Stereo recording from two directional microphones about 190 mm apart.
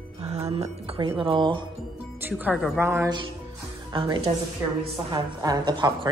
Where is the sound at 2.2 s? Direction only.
10° right (ahead or behind).